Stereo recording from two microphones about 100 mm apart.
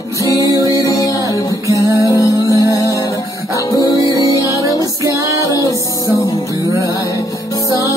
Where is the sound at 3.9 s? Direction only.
35° left (ahead or behind).